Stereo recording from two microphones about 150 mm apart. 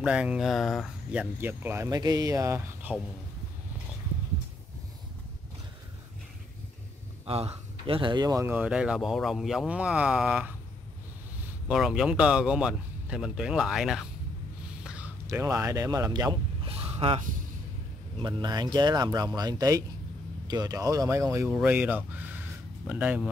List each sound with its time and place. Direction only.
0.0 s speech: 5° right (ahead or behind)
7.2 s a man's voice: 40° right (ahead or behind)
8.5 s speech: 10° right (ahead or behind)
11.6 s speech: 5° right (ahead or behind)
14.8 s a sound: 5° right (ahead or behind)
15.2 s speech: 20° right (ahead or behind)
16.6 s a sound: 40° right (ahead or behind)
18.2 s speech: 30° right (ahead or behind)
21.5 s speech: 10° right (ahead or behind)